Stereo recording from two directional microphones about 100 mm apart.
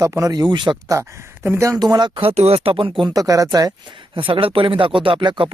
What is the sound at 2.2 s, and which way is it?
Speech, 80° right.